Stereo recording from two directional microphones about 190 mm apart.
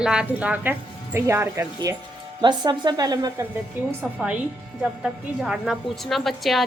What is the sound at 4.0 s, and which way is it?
A woman's voice, centre (ahead or behind).